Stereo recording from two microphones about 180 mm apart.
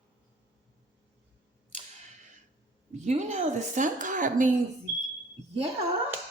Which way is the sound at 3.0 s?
40° right (ahead or behind).